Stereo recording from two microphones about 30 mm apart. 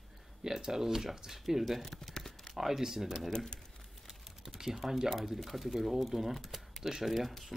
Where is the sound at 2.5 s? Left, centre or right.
Centre.